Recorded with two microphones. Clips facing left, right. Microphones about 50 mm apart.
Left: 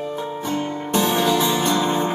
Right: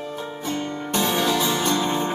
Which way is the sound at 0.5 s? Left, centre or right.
Centre.